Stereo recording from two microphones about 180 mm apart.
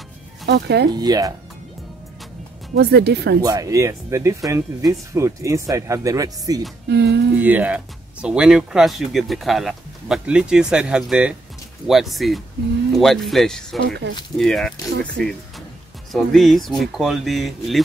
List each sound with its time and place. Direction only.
0.5 s speech: 70° right (ahead or behind)
0.9 s speech: 20° right (ahead or behind)
2.7 s speech: 65° right (ahead or behind)
3.4 s speech: 20° right (ahead or behind)
6.9 s speech: 65° right (ahead or behind)
7.3 s speech: 10° right (ahead or behind)
13.8 s speech: 65° right (ahead or behind)
14.4 s speech: centre (ahead or behind)